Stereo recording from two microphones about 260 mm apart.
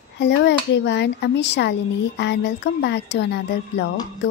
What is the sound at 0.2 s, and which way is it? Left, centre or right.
Speech, left.